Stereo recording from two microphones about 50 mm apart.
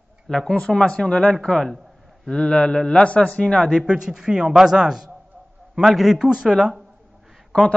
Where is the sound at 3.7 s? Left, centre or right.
Centre.